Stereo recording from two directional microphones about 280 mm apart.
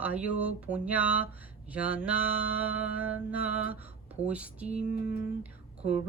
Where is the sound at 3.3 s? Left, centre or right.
Left.